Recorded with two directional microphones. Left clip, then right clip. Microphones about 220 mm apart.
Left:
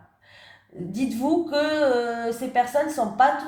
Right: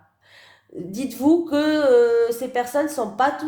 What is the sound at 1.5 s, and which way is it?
A woman's voice, 50° right (ahead or behind).